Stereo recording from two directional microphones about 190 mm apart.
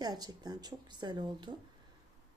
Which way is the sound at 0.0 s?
20° right (ahead or behind).